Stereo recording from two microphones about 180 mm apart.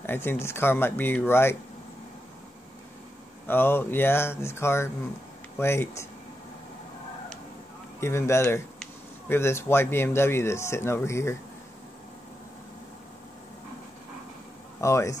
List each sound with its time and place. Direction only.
0.0 s speech: 10° left (ahead or behind)
3.4 s speech: 10° left (ahead or behind)
8.0 s speech: 15° left (ahead or behind)
14.8 s speech: 15° left (ahead or behind)